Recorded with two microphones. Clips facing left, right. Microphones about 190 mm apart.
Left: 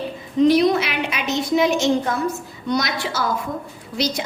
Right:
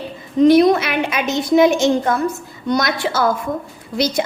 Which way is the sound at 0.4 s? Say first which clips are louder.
Right 5 dB; 50° right (ahead or behind).